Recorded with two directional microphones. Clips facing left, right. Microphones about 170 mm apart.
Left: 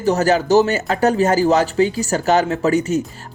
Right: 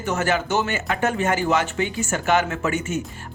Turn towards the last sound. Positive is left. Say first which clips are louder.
# left 7 dB
turn(degrees=35)  # may be behind; listen again after turning